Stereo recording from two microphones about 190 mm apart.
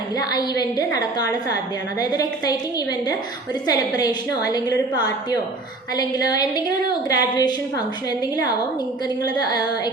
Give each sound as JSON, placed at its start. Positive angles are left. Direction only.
{"t": 0.2, "sound": "a woman's voice", "side_deg": 20}
{"t": 3.7, "sound": "a woman's voice", "side_deg": 20}
{"t": 6.0, "sound": "a woman's voice", "side_deg": 20}
{"t": 9.2, "sound": "a woman's voice", "side_deg": 20}